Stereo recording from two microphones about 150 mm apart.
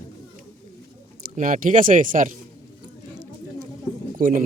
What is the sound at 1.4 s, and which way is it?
Speech, 65° right (ahead or behind).